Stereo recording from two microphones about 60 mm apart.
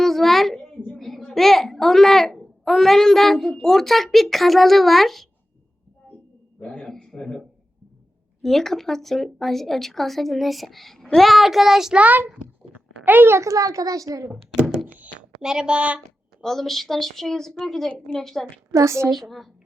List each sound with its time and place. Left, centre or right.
0.0 s a sound: centre
0.9 s a child's voice: centre
6.6 s speech: centre
11.9 s a child's voice: right
12.7 s a sound: centre
13.1 s a child's voice: right
13.4 s a woman's voice: right
15.4 s a woman's voice: centre
16.4 s a woman's voice: centre
18.7 s a woman's voice: right
19.1 s speech: centre